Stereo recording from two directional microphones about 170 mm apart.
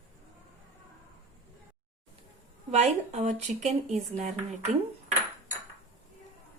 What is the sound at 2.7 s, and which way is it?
Speech, 40° right (ahead or behind).